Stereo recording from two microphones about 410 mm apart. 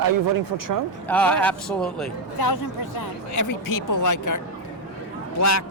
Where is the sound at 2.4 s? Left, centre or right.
Left.